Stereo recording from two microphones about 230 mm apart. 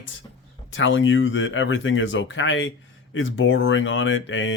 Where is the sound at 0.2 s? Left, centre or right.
Centre.